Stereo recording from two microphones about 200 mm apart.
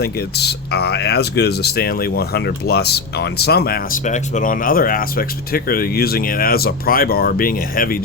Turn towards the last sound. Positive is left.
turn(degrees=45)  # may be behind; listen again after turning